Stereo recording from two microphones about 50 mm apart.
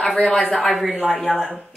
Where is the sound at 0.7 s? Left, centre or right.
Centre.